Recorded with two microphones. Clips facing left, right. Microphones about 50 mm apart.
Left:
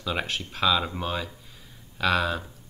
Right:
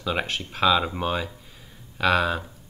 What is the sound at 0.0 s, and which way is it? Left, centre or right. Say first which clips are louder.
Speech: right 2 dB; centre.